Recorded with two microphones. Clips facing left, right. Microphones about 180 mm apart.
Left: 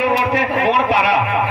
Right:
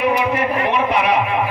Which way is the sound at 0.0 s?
75° left (ahead or behind).